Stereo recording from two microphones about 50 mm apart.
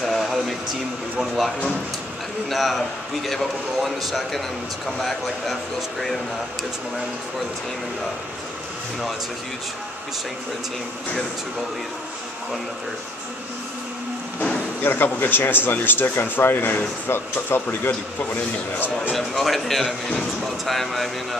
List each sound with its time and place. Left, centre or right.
0.0 s a sound: centre
1.2 s a man's voice: centre
2.5 s a man's voice: centre
14.8 s speech: left
19.1 s a man's voice: centre